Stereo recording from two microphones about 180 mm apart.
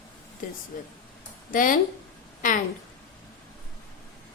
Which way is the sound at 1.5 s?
50° left (ahead or behind).